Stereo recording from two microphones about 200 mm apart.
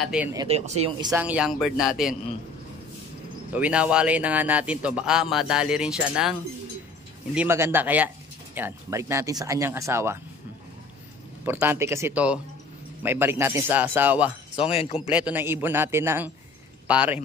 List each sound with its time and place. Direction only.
0.0 s a man's voice: 5° right (ahead or behind)
0.5 s speech: 30° right (ahead or behind)
1.0 s a man's voice: 10° right (ahead or behind)
3.5 s a man's voice: 5° right (ahead or behind)
7.3 s speech: 10° right (ahead or behind)
11.4 s speech: 10° right (ahead or behind)
14.7 s a man's voice: 30° left (ahead or behind)
15.0 s speech: 5° right (ahead or behind)